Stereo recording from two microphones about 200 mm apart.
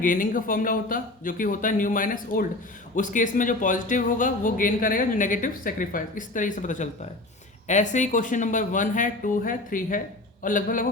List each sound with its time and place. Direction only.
0.0 s speech: 40° left (ahead or behind)